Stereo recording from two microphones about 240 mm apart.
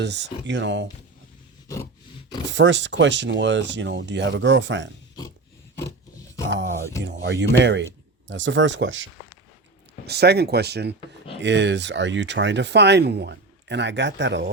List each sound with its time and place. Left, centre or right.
0.0 s speech: right
1.6 s a sound: centre
2.5 s speech: right
7.0 s speech: right
10.1 s speech: right